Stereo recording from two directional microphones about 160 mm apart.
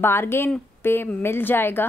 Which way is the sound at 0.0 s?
15° left (ahead or behind).